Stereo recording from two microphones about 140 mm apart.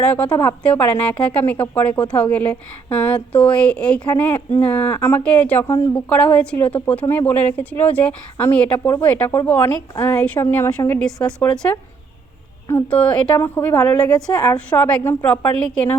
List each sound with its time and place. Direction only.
0.0 s speech: 10° left (ahead or behind)
6.1 s speech: 10° left (ahead or behind)